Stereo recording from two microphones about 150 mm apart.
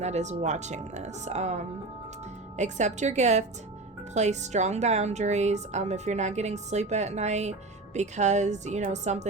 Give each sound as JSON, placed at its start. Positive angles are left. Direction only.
{"t": 0.0, "sound": "a woman's voice", "side_deg": -50}